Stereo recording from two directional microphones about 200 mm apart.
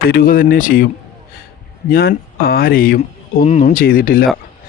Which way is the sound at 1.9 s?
50° left (ahead or behind).